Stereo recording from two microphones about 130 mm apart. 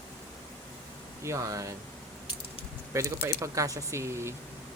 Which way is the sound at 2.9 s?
25° right (ahead or behind).